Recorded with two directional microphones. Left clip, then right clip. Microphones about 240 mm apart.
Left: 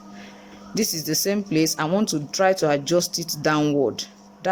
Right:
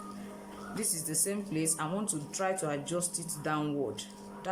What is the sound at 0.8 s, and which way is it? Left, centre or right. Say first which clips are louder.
Speech: left 13 dB; left.